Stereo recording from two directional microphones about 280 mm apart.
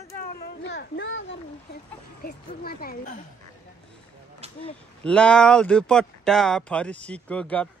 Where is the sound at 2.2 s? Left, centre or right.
Left.